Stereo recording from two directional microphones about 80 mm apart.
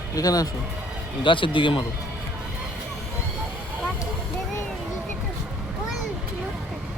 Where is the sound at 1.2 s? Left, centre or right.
Left.